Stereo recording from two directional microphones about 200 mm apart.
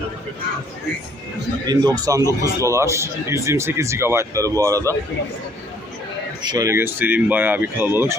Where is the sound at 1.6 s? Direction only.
20° right (ahead or behind).